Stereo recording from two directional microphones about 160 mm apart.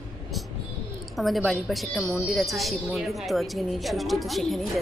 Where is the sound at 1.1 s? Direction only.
Centre (ahead or behind).